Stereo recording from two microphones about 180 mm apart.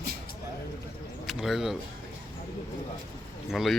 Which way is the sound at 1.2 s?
Centre (ahead or behind).